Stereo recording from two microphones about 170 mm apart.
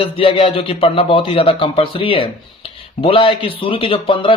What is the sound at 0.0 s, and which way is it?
A man's voice, 35° left (ahead or behind).